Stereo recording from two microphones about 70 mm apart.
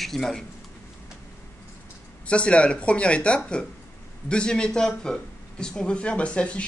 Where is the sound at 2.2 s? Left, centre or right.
Centre.